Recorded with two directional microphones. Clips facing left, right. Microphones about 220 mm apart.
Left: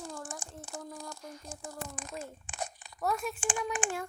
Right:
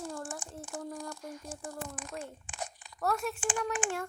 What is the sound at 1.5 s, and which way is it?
Speech, 25° left (ahead or behind).